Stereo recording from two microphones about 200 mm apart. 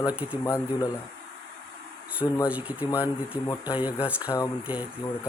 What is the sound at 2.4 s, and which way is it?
Speech, 5° right (ahead or behind).